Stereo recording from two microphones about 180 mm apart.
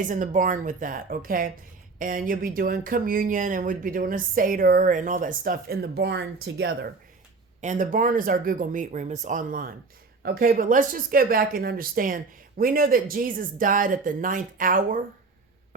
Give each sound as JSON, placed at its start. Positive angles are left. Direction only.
{"t": 0.0, "sound": "speech", "side_deg": -45}
{"t": 7.6, "sound": "speech", "side_deg": -45}